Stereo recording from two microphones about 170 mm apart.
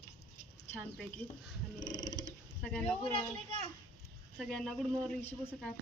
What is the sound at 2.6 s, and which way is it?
Speech, 5° left (ahead or behind).